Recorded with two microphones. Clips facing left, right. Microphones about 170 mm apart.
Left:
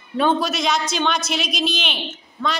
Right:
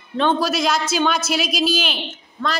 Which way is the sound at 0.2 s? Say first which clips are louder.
Right 1 dB; centre (ahead or behind).